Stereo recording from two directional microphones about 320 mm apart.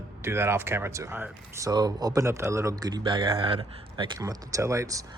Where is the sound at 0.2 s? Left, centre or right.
Centre.